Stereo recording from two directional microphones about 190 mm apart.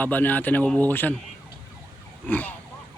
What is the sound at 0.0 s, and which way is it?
Speech, 10° left (ahead or behind).